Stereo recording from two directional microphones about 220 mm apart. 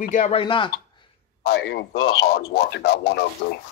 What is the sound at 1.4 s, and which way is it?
A man's voice, 45° left (ahead or behind).